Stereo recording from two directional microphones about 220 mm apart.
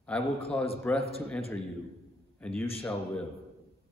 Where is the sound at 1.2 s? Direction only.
5° left (ahead or behind).